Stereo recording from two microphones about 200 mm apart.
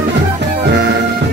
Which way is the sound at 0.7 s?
60° right (ahead or behind).